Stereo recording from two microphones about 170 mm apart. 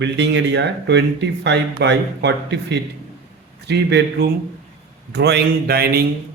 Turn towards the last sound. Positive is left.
turn(degrees=-65)  # may be behind; listen again after turning